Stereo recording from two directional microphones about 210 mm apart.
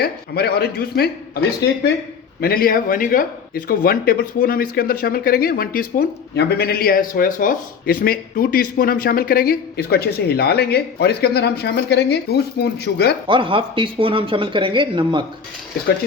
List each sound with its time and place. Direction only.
0.0 s speech: 50° left (ahead or behind)
2.4 s speech: 45° left (ahead or behind)
13.2 s speech: 25° right (ahead or behind)